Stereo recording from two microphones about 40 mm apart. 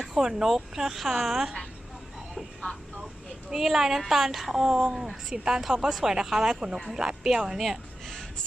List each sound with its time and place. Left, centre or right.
0.0 s a sound: centre
0.3 s a woman's voice: centre
3.5 s a woman's voice: centre
7.6 s speech: centre